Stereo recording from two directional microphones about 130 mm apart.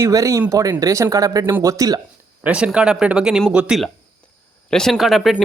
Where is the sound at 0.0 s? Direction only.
25° right (ahead or behind).